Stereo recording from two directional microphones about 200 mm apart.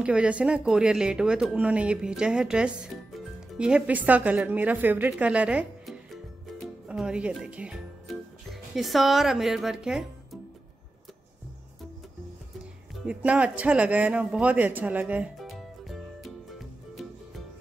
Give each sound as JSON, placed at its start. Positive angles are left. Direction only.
{"t": 0.0, "sound": "speech", "side_deg": -5}
{"t": 13.0, "sound": "speech", "side_deg": -5}